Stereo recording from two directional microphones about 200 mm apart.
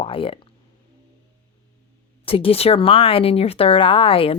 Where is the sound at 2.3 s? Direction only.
25° left (ahead or behind).